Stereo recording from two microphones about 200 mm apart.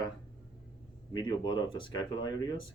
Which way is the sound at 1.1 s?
20° left (ahead or behind).